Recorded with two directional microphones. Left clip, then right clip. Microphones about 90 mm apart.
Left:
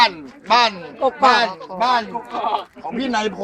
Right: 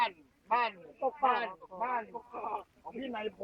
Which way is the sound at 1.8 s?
45° left (ahead or behind).